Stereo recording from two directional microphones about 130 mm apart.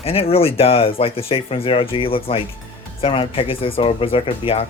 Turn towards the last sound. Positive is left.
turn(degrees=45)  # may be behind; listen again after turning